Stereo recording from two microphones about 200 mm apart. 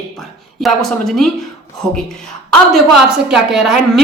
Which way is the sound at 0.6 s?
Centre (ahead or behind).